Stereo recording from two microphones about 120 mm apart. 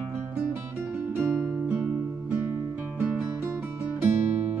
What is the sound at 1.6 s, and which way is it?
Music, 10° right (ahead or behind).